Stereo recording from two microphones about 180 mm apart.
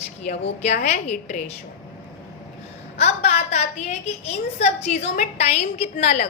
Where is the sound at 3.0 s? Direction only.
35° left (ahead or behind).